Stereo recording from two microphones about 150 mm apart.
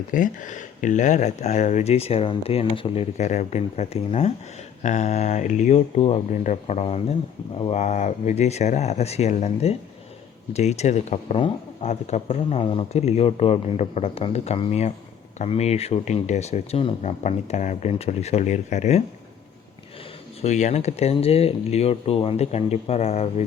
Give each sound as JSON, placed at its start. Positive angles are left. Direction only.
{"t": 0.1, "sound": "speech", "side_deg": 60}
{"t": 20.4, "sound": "speech", "side_deg": 50}